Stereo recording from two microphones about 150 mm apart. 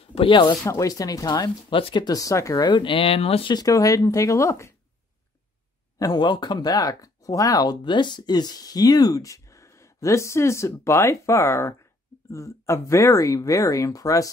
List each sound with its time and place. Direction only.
0.1 s speech: 35° left (ahead or behind)
0.7 s speech: 20° left (ahead or behind)
5.9 s speech: 25° left (ahead or behind)